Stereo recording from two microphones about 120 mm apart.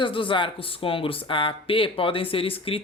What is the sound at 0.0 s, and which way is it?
Speech, 45° left (ahead or behind).